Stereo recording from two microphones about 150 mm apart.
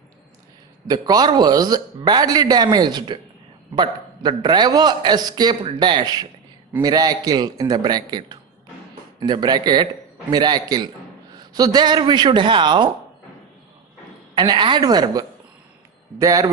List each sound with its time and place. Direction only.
0.8 s a man's voice: 25° right (ahead or behind)
14.3 s a man's voice: 30° right (ahead or behind)